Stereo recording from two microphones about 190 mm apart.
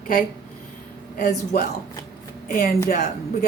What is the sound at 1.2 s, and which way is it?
Speech, 50° left (ahead or behind).